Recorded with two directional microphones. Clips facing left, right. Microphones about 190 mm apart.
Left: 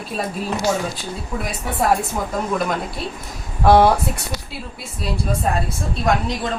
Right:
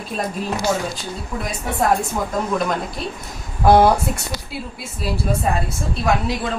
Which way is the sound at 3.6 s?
Centre (ahead or behind).